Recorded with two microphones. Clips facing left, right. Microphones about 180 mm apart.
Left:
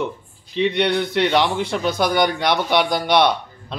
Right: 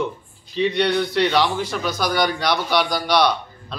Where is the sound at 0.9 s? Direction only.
20° left (ahead or behind).